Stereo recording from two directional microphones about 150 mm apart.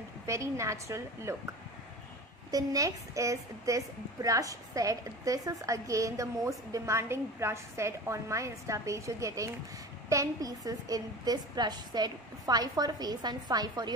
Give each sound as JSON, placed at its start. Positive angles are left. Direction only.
{"t": 0.3, "sound": "a woman's voice", "side_deg": -20}
{"t": 2.5, "sound": "a woman's voice", "side_deg": -25}